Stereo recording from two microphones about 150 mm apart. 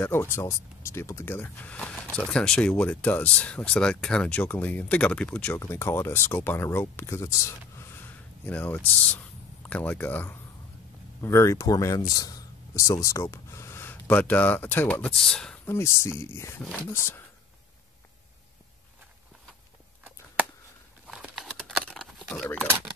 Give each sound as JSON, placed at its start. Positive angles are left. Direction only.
{"t": 0.0, "sound": "speech", "side_deg": 15}
{"t": 15.6, "sound": "speech", "side_deg": 15}
{"t": 21.1, "sound": "a sound", "side_deg": 0}